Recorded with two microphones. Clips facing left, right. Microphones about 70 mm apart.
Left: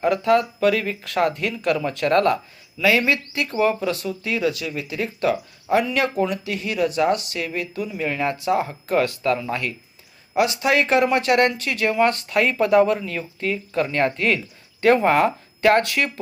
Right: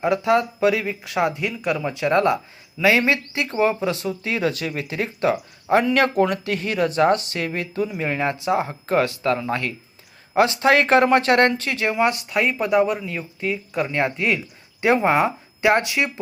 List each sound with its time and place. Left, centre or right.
0.0 s speech: centre
12.1 s speech: centre